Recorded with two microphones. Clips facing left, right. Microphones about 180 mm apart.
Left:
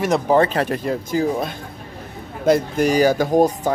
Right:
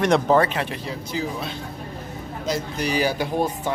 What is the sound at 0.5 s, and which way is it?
Speech, 45° left (ahead or behind).